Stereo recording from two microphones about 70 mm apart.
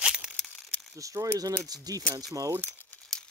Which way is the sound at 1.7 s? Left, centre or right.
Right.